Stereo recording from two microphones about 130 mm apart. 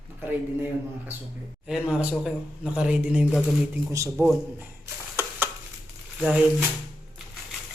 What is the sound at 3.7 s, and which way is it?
Speech, 20° right (ahead or behind).